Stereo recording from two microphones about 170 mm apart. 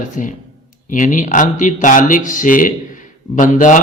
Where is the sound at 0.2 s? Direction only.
50° left (ahead or behind).